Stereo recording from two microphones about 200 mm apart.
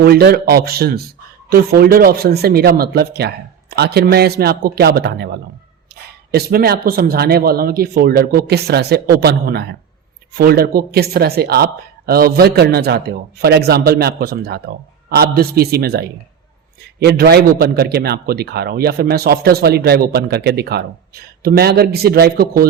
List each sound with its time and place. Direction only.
0.0 s speech: 50° right (ahead or behind)